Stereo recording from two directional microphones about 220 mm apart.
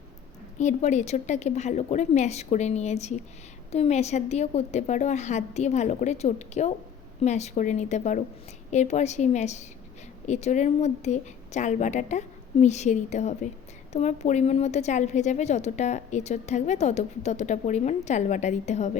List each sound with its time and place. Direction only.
0.6 s a woman's voice: 30° left (ahead or behind)